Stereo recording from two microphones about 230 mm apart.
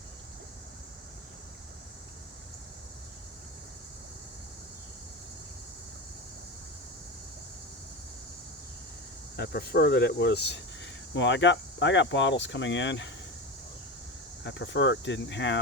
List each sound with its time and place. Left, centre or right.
9.3 s speech: left
14.4 s speech: left